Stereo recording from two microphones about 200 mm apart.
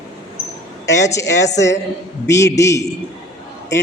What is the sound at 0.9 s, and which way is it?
A man's voice, 15° left (ahead or behind).